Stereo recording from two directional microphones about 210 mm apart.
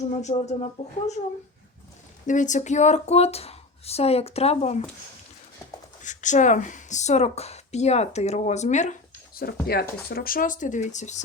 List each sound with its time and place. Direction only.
0.1 s speech: 30° left (ahead or behind)
2.2 s speech: 35° left (ahead or behind)
6.0 s speech: 35° left (ahead or behind)